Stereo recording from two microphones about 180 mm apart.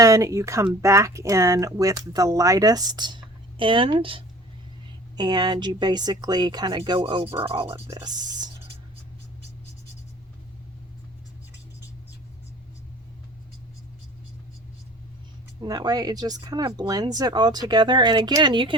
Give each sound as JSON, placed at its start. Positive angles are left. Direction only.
{"t": 0.0, "sound": "speech", "side_deg": -20}
{"t": 7.7, "sound": "speech", "side_deg": -20}
{"t": 15.6, "sound": "speech", "side_deg": -20}